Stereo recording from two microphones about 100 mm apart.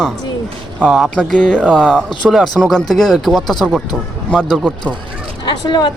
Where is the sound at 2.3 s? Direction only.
Centre (ahead or behind).